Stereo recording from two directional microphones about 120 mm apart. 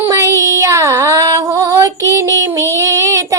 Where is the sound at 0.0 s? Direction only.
25° right (ahead or behind).